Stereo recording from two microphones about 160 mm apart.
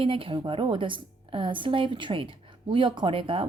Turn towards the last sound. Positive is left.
turn(degrees=-35)  # may be behind; listen again after turning